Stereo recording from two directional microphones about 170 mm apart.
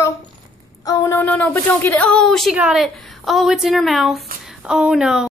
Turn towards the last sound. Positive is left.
turn(degrees=-5)  # may be behind; listen again after turning